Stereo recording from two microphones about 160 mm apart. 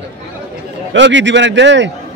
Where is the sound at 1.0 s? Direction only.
90° right.